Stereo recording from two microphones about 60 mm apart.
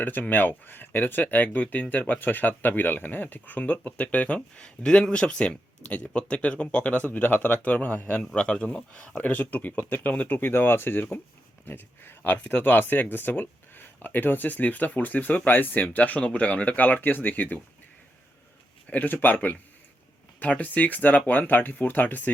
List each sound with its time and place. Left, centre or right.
0.0 s speech: left
8.2 s speech: centre; by 17.6 s left
18.9 s speech: left